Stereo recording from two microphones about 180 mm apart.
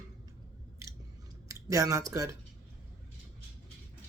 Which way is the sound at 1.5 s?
20° right (ahead or behind).